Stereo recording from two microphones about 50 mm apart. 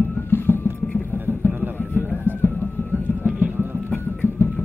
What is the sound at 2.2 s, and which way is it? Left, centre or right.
Music, left.